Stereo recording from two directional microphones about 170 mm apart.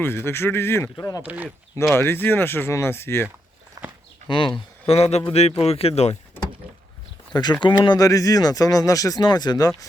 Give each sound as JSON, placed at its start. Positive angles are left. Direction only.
{"t": 0.0, "sound": "speech", "side_deg": 15}
{"t": 1.2, "sound": "speech", "side_deg": -10}
{"t": 2.0, "sound": "speech", "side_deg": 15}
{"t": 3.8, "sound": "walk", "side_deg": -20}
{"t": 4.3, "sound": "speech", "side_deg": 30}
{"t": 7.6, "sound": "speech", "side_deg": 25}